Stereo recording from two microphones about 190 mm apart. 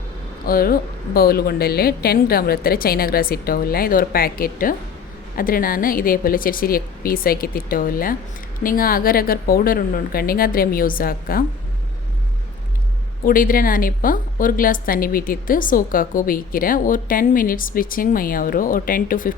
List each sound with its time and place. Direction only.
0.4 s a woman's voice: 50° left (ahead or behind)
13.2 s a woman's voice: 50° left (ahead or behind)